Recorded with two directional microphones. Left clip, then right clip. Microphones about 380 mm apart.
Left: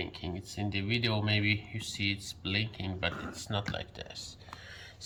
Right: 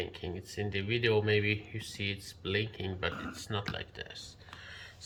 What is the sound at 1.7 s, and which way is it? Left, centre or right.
Speech, centre.